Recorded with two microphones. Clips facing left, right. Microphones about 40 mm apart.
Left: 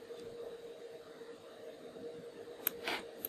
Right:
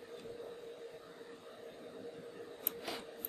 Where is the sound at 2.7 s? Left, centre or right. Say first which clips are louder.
Left 4 dB; left.